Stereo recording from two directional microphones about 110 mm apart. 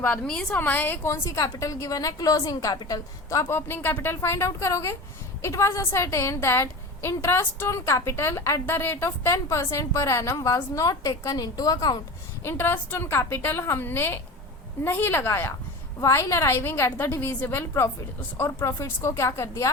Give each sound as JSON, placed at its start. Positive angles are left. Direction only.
{"t": 0.0, "sound": "a woman's voice", "side_deg": 10}
{"t": 12.4, "sound": "a woman's voice", "side_deg": 20}